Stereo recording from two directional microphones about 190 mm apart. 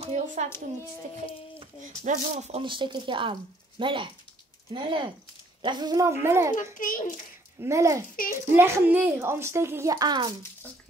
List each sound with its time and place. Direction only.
0.0 s a child's voice: 40° right (ahead or behind)
2.0 s a woman's voice: 35° right (ahead or behind); by 6.5 s 15° right (ahead or behind)
6.5 s a child's voice: 45° left (ahead or behind)
7.6 s a woman's voice: 15° right (ahead or behind)